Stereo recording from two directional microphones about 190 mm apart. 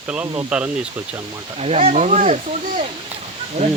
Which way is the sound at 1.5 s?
35° right (ahead or behind).